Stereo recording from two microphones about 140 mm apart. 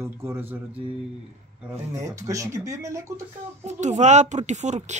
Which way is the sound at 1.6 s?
25° right (ahead or behind).